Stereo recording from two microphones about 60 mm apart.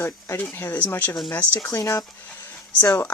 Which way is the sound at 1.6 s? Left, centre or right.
Left.